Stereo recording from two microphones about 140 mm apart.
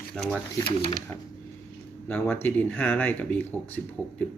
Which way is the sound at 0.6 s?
40° left (ahead or behind).